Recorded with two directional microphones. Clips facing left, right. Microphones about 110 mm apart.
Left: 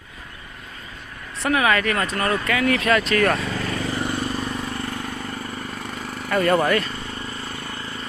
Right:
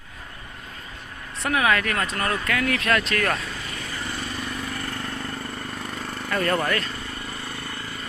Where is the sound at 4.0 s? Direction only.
55° left (ahead or behind).